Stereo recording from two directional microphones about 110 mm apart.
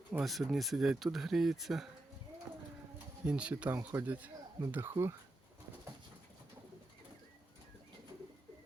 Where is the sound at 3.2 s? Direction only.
10° right (ahead or behind).